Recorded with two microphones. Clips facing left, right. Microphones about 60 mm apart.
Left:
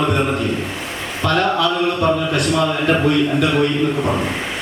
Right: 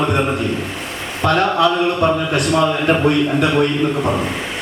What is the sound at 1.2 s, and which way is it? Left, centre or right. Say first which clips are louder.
A man's voice: right 2 dB; right.